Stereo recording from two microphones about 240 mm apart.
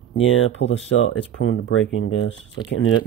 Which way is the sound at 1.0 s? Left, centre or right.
Left.